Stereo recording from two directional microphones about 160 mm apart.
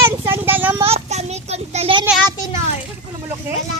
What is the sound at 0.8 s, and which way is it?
A child's voice, 40° right (ahead or behind).